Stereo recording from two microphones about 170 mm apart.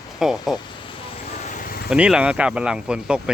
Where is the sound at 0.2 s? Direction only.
Centre (ahead or behind).